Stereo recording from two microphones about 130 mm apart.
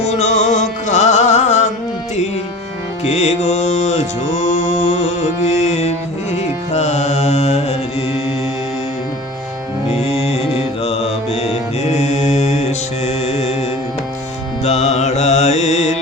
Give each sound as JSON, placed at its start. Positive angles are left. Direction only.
{"t": 0.0, "sound": "music", "side_deg": 60}
{"t": 3.0, "sound": "music", "side_deg": 60}
{"t": 6.7, "sound": "mantra", "side_deg": 60}
{"t": 10.0, "sound": "mantra", "side_deg": 50}
{"t": 14.6, "sound": "music", "side_deg": 55}